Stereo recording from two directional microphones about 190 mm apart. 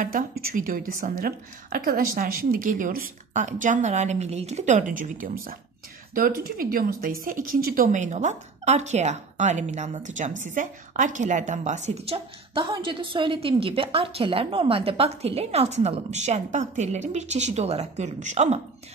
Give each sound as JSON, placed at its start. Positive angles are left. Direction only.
{"t": 0.0, "sound": "a woman's voice", "side_deg": -50}